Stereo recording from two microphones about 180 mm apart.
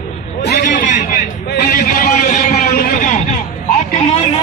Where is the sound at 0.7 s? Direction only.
45° left (ahead or behind).